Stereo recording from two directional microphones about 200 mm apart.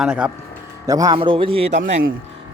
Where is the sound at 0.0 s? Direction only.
5° right (ahead or behind).